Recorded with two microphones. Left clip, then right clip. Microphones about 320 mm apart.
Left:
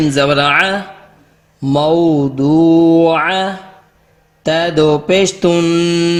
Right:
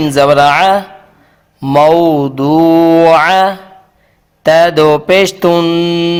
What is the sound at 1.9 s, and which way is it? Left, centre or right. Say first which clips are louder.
Speech: right 3 dB; right.